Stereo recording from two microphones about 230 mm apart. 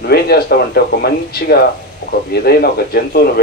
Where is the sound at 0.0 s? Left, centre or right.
Left.